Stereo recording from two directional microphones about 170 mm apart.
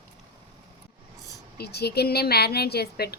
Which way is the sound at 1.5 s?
70° left (ahead or behind).